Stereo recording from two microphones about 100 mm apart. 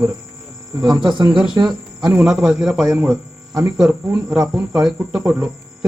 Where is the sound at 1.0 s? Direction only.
50° right (ahead or behind).